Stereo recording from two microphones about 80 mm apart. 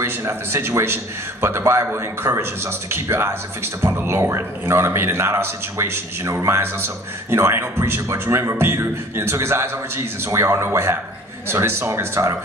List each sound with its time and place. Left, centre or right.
0.0 s a man's voice: right